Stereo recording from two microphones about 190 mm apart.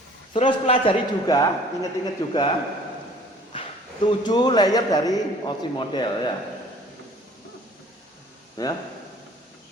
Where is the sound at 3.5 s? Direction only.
25° left (ahead or behind).